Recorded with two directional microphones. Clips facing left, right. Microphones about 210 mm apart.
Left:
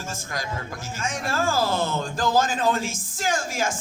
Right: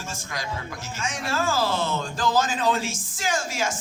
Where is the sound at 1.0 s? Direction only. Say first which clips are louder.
Left 1 dB; 50° left (ahead or behind).